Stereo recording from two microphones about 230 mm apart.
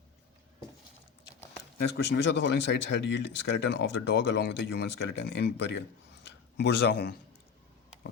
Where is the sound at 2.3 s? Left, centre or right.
Left.